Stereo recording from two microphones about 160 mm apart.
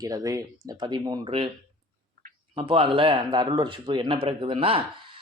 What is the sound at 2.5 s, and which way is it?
A man's voice, 35° right (ahead or behind).